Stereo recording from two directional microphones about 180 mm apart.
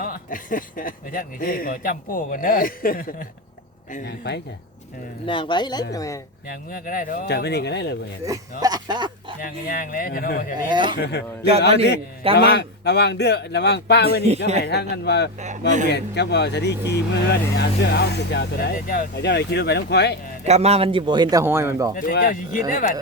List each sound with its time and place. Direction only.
0.0 s speech: 50° left (ahead or behind)
4.0 s speech: 70° left (ahead or behind)
5.2 s speech: 25° left (ahead or behind)
6.5 s speech: 55° left (ahead or behind)
8.3 s speech: 20° right (ahead or behind)
9.4 s speech: 50° left (ahead or behind)
10.7 s speech: 25° right (ahead or behind)
12.4 s speech: 70° left (ahead or behind)
15.4 s speech: 40° right (ahead or behind)
15.9 s speech: 65° left (ahead or behind); by 19.0 s 50° left (ahead or behind)
19.1 s speech: 70° left (ahead or behind)
20.4 s speech: 35° right (ahead or behind); by 21.9 s 15° right (ahead or behind)
21.9 s speech: 50° left (ahead or behind)